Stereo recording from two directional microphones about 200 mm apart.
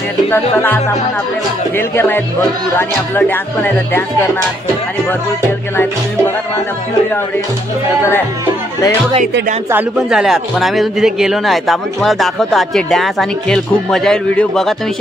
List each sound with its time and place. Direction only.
0.3 s speech: 10° left (ahead or behind)
9.7 s speech: 5° right (ahead or behind)